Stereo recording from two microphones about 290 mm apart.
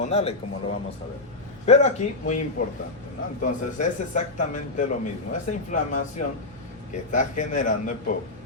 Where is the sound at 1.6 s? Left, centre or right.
Left.